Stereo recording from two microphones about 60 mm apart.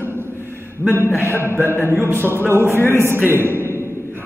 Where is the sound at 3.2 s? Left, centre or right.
Right.